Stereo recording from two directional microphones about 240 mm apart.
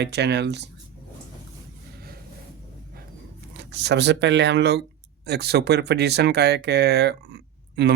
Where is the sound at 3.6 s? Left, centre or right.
Right.